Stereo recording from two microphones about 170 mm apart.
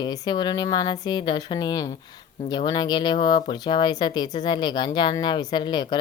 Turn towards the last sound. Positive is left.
turn(degrees=25)  # may be behind; listen again after turning